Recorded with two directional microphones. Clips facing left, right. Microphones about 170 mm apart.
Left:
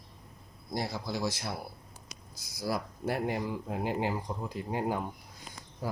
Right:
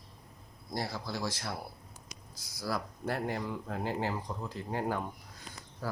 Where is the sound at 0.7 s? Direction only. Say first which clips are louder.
Left 2 dB; 15° left (ahead or behind).